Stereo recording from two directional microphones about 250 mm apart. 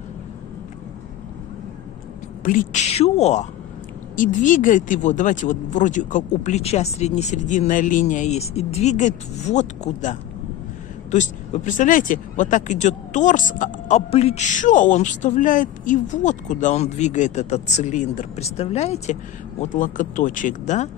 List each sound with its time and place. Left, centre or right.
2.4 s speech: left